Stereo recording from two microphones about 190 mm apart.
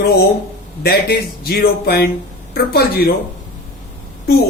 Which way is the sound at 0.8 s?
55° left (ahead or behind).